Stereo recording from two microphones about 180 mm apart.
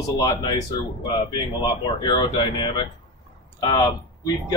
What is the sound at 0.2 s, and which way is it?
Speech, 20° left (ahead or behind).